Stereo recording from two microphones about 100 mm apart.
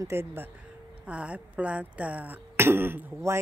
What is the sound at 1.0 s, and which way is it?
Speech, 15° right (ahead or behind).